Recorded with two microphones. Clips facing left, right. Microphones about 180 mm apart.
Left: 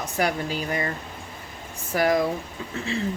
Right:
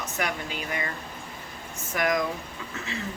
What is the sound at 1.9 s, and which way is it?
Speech, 30° left (ahead or behind).